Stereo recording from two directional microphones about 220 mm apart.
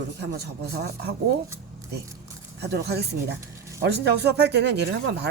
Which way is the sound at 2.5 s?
50° right (ahead or behind).